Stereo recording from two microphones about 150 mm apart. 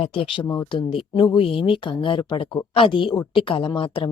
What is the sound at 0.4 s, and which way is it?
Speech, 20° left (ahead or behind).